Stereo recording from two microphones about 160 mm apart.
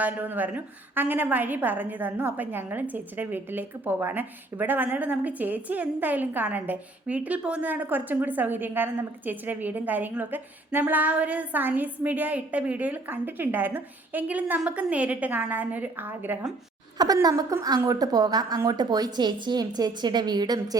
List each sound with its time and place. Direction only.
0.0 s a woman's voice: 10° right (ahead or behind)
17.0 s a woman's voice: 25° right (ahead or behind)